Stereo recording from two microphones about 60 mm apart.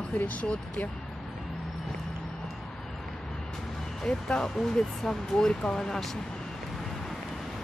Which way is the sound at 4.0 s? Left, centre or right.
Centre.